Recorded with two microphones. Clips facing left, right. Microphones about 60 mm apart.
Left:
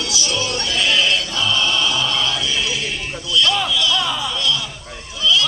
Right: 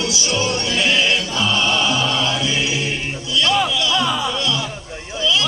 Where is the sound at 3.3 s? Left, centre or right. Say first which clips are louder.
Even; right.